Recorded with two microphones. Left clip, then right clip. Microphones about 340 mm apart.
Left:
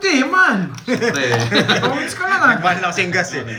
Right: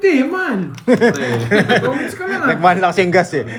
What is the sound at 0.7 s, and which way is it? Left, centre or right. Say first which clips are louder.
Speech: right 5 dB; centre.